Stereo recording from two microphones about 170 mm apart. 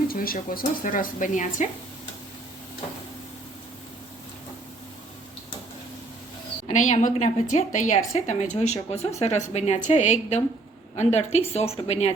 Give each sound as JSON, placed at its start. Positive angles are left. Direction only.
{"t": 0.1, "sound": "a woman's voice", "side_deg": 60}
{"t": 6.7, "sound": "a woman's voice", "side_deg": 45}